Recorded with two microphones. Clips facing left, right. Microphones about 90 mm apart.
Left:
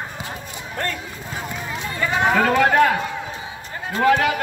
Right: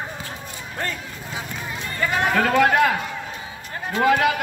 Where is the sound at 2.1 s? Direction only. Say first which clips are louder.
Left 3 dB; 15° left (ahead or behind).